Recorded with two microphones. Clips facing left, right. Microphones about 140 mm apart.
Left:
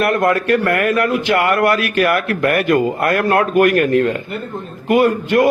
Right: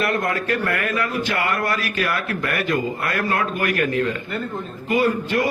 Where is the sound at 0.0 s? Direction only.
60° left (ahead or behind).